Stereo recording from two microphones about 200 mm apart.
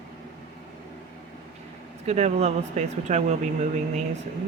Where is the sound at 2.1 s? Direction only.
35° right (ahead or behind).